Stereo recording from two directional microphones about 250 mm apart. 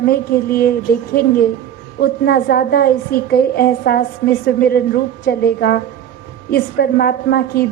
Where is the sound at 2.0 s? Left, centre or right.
Left.